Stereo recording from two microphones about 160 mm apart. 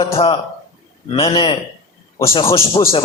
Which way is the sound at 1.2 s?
35° left (ahead or behind).